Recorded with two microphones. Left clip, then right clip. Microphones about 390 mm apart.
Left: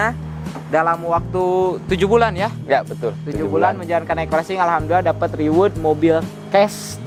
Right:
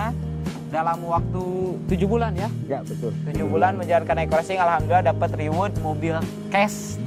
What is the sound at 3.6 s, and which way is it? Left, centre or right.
Speech, right.